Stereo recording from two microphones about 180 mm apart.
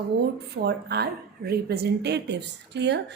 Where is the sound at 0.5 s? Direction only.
65° right (ahead or behind).